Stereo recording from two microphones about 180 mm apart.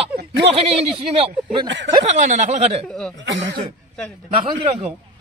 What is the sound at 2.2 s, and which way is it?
Speech, 40° right (ahead or behind).